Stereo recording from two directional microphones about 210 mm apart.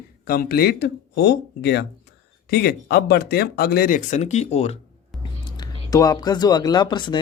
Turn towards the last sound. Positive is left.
turn(degrees=20)  # may be behind; listen again after turning